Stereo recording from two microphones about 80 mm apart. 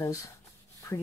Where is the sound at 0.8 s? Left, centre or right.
Left.